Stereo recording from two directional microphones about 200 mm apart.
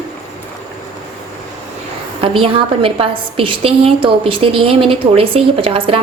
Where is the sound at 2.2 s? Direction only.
25° right (ahead or behind).